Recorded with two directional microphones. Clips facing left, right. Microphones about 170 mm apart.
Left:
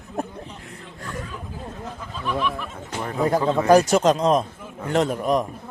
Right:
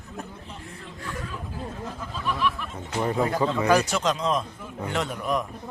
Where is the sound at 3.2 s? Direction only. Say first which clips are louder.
Left 8 dB; 40° left (ahead or behind).